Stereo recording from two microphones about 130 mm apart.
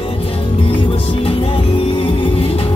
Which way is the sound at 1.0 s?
40° left (ahead or behind).